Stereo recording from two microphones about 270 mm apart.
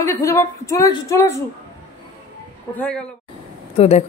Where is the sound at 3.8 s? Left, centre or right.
Left.